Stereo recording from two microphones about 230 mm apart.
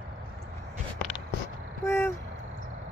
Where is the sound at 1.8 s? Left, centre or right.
Centre.